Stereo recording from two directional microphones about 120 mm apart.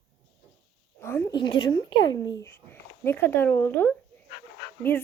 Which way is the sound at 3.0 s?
20° left (ahead or behind).